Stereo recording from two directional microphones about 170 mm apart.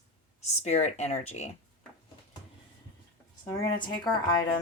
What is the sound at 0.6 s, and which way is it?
Speech, 40° left (ahead or behind).